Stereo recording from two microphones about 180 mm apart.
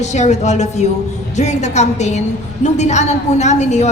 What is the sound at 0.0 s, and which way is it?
A woman's voice, 40° left (ahead or behind).